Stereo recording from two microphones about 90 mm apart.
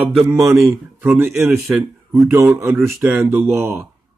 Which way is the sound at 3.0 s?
30° right (ahead or behind).